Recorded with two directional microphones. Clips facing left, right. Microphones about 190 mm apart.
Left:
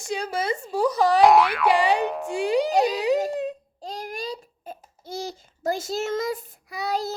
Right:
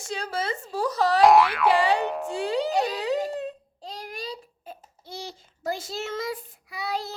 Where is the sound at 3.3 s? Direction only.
15° left (ahead or behind).